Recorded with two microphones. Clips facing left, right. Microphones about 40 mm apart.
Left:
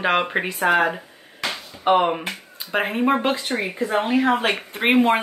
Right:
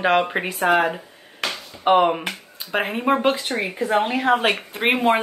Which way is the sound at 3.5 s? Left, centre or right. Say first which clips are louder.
Even; centre.